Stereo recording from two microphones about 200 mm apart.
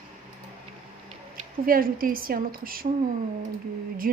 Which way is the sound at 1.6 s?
45° right (ahead or behind).